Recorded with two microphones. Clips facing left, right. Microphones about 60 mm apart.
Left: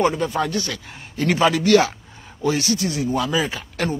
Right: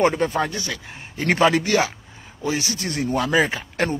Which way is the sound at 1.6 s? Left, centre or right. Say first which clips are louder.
Left 5 dB; centre.